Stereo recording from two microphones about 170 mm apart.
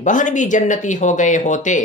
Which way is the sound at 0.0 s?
45° left (ahead or behind).